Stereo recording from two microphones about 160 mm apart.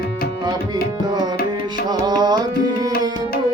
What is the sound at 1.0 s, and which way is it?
Tabla, 25° right (ahead or behind).